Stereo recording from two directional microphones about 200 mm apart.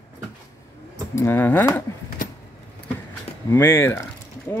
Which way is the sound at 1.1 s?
10° left (ahead or behind).